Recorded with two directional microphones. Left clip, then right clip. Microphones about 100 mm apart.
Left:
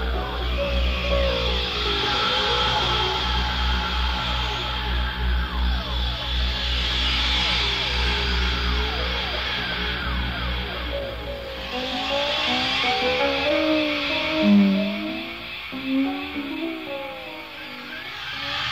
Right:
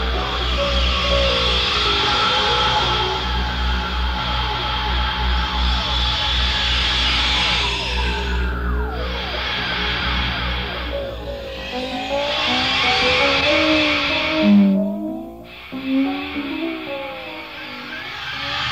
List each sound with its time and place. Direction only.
0.2 s music: 30° left (ahead or behind)
9.4 s music: 30° left (ahead or behind)
12.1 s car: 30° left (ahead or behind)